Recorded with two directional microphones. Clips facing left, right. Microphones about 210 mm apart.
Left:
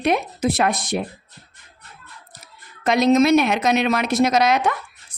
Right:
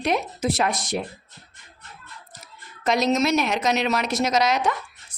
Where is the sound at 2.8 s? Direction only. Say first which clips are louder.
Left 6 dB; 60° left (ahead or behind).